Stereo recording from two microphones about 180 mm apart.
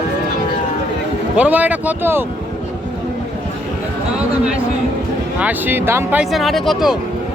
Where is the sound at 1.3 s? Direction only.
10° right (ahead or behind).